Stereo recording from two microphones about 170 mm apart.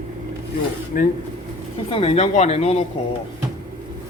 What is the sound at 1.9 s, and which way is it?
Speech, 35° left (ahead or behind).